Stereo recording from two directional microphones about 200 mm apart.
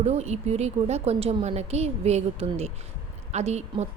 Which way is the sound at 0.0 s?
35° right (ahead or behind).